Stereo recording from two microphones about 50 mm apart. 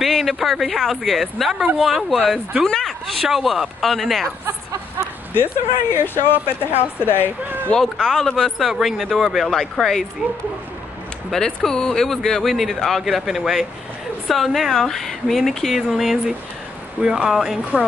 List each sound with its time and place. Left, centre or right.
0.0 s speech: centre
5.3 s a woman's voice: left
7.4 s a sound: right
7.8 s speech: centre
11.4 s speech: centre
13.0 s speech: centre